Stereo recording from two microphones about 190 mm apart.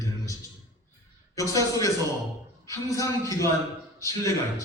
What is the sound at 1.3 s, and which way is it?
A man's voice, 15° left (ahead or behind).